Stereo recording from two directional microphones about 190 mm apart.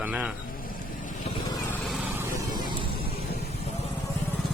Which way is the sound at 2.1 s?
15° right (ahead or behind).